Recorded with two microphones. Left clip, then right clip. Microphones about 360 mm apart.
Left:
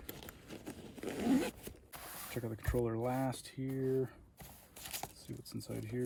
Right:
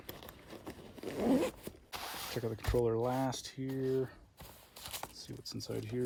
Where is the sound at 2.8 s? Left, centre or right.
Right.